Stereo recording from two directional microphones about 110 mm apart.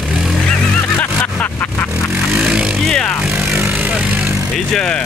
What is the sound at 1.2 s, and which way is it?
Vehicle, 15° left (ahead or behind).